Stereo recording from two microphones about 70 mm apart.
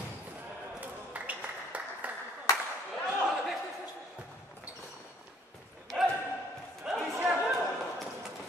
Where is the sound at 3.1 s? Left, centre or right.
Centre.